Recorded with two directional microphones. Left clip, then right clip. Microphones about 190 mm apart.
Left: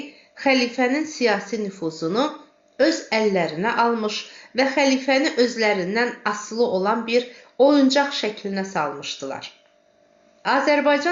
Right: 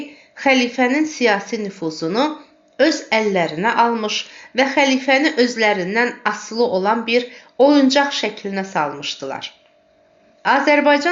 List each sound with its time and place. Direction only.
0.3 s a woman's voice: 30° right (ahead or behind)